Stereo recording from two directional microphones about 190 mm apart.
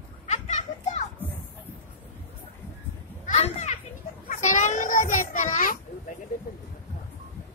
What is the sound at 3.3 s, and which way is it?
Children playing, 35° left (ahead or behind).